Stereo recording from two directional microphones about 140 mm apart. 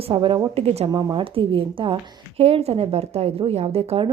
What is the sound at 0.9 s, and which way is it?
A woman's voice, 30° right (ahead or behind).